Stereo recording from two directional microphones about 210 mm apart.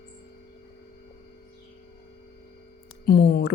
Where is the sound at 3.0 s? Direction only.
45° left (ahead or behind).